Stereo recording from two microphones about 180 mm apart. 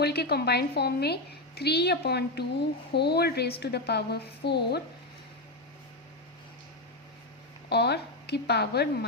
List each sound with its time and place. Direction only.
0.0 s a woman's voice: 65° left (ahead or behind)
7.7 s a woman's voice: 65° left (ahead or behind)